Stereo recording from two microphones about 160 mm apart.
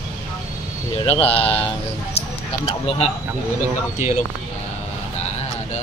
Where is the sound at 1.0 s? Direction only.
35° left (ahead or behind).